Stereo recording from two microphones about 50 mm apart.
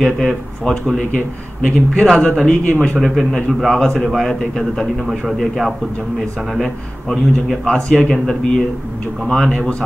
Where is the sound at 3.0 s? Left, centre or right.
Centre.